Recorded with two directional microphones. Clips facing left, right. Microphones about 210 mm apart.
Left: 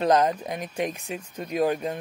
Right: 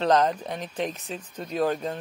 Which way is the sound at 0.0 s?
10° left (ahead or behind).